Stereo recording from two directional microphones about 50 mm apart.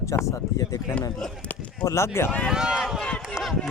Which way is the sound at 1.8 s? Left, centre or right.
Left.